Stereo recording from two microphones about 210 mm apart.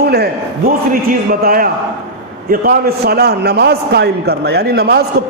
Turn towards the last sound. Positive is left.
turn(degrees=-50)  # may be behind; listen again after turning